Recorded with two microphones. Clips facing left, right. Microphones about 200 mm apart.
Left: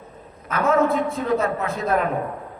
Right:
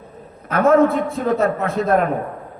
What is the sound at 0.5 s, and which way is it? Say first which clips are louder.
Speech: right 5 dB; 55° right (ahead or behind).